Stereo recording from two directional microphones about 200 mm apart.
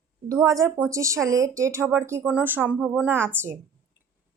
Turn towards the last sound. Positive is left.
turn(degrees=-10)  # may be behind; listen again after turning